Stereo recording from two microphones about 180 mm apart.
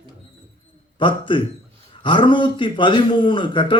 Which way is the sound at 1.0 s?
25° left (ahead or behind).